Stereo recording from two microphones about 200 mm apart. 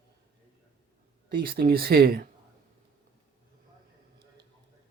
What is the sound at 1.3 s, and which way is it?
Speech, 50° right (ahead or behind).